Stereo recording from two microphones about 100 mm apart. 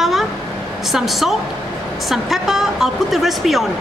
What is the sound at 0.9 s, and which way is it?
A woman's voice, 5° right (ahead or behind).